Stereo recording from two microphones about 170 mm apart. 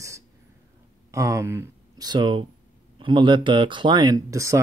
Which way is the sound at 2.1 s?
25° right (ahead or behind).